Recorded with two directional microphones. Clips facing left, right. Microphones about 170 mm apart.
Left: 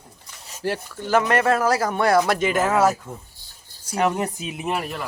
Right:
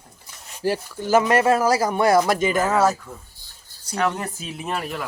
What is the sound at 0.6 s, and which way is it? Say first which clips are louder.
Speech: right 3 dB; 5° right (ahead or behind).